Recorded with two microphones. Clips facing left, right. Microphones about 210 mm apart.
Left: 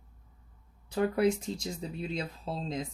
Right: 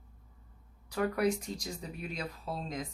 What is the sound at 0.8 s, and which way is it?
Speech, 25° left (ahead or behind).